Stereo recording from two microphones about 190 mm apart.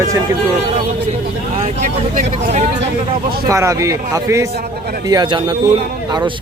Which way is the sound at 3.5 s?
15° right (ahead or behind).